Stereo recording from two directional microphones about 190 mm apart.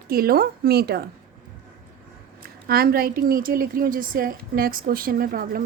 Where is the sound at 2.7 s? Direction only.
50° right (ahead or behind).